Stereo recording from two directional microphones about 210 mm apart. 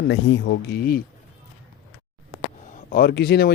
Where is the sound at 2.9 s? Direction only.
50° left (ahead or behind).